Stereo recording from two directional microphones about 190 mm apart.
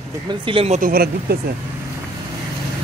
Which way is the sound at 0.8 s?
50° right (ahead or behind).